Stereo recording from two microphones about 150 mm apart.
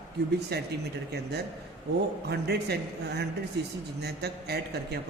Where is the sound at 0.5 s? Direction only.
90° right.